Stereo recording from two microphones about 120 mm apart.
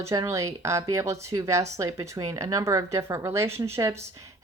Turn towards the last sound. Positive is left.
turn(degrees=-25)  # may be behind; listen again after turning